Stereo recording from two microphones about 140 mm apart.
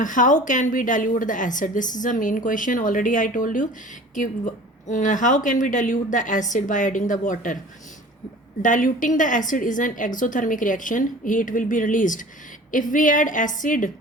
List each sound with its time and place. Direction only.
0.0 s a woman's voice: 65° left (ahead or behind)
8.6 s a woman's voice: 65° left (ahead or behind)